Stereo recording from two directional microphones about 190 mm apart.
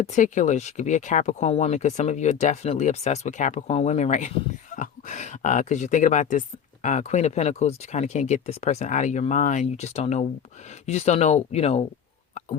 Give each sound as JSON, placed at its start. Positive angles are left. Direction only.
{"t": 0.0, "sound": "speech", "side_deg": 40}